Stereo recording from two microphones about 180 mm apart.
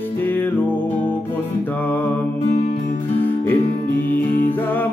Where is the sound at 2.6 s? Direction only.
50° left (ahead or behind).